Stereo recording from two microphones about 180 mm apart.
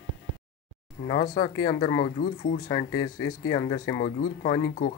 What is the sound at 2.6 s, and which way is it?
Speech, 20° left (ahead or behind).